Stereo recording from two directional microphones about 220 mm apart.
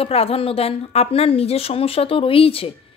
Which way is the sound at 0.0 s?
25° left (ahead or behind).